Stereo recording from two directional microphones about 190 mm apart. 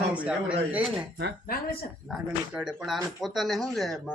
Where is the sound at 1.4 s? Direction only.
50° left (ahead or behind).